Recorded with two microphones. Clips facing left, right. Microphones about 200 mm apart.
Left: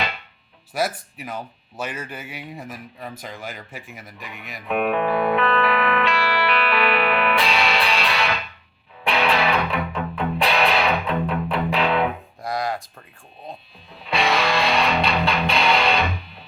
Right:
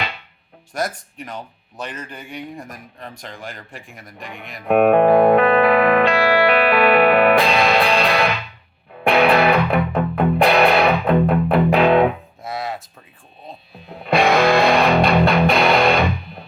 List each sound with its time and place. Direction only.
0.7 s speech: 5° left (ahead or behind)
4.6 s music: 50° right (ahead or behind)
12.4 s a sound: centre (ahead or behind)
13.9 s music: 50° right (ahead or behind)